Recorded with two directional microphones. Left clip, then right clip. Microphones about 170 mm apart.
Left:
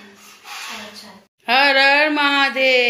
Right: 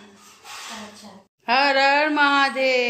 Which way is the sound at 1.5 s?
Centre (ahead or behind).